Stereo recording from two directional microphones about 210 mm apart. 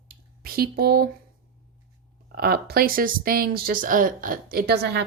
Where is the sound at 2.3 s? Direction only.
45° right (ahead or behind).